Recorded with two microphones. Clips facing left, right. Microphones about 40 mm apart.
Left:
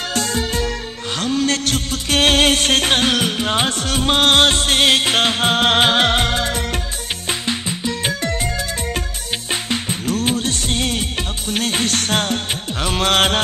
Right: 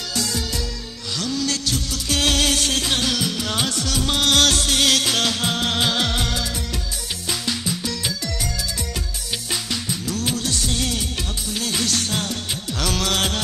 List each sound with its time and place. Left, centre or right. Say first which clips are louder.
0.1 s music: left 4 dB; left
1.1 s a sound: left 5 dB; left
7.2 s music: left 2 dB; left
8.0 s music: left 6 dB; left
9.5 s music: left 5 dB; left
12.8 s music: left 5 dB; left
13.1 s music: left 11 dB; left